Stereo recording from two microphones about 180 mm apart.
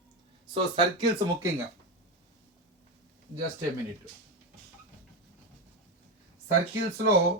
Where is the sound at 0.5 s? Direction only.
30° right (ahead or behind).